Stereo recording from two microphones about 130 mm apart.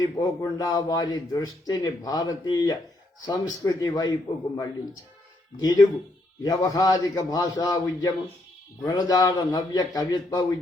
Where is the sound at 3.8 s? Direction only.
30° left (ahead or behind).